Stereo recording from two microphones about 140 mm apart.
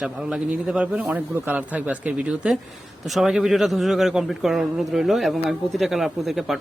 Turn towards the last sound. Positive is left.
turn(degrees=0)  # may be behind; listen again after turning